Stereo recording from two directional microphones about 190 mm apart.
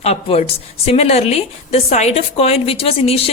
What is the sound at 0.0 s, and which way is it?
Speech, 30° left (ahead or behind).